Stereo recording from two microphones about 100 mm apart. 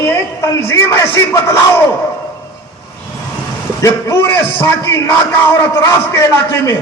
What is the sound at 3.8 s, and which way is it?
A man's voice, 30° left (ahead or behind).